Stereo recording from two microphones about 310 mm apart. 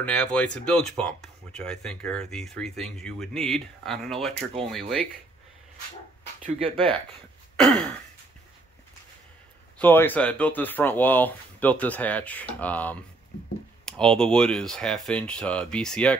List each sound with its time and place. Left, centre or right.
0.0 s speech: centre
6.6 s speech: centre
7.5 s speech: centre
9.8 s speech: centre